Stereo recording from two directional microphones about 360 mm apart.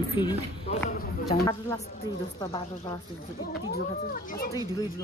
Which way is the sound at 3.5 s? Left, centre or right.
Left.